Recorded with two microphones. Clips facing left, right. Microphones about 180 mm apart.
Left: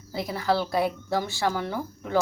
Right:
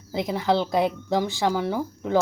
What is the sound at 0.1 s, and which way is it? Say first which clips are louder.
Speech: right 3 dB; 20° right (ahead or behind).